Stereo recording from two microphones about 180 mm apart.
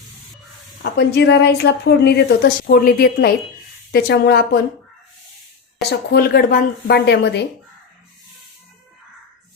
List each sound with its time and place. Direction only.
0.8 s a woman's voice: 65° left (ahead or behind)
6.1 s a woman's voice: 60° left (ahead or behind)